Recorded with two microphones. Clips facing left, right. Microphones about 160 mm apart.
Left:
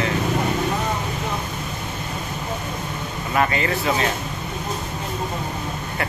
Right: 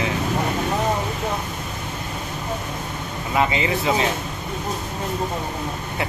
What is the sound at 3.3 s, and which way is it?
Speech, 15° right (ahead or behind).